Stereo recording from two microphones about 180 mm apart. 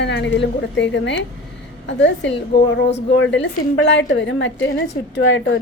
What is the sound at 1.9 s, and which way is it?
A woman's voice, 90° left.